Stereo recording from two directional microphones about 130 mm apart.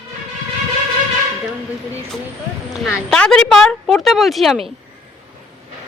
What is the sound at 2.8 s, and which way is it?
Speech, 5° left (ahead or behind).